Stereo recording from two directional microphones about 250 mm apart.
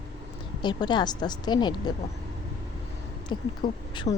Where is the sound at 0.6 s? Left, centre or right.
Centre.